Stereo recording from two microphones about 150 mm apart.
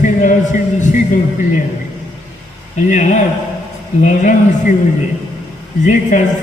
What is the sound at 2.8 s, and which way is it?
A man's voice, 55° left (ahead or behind).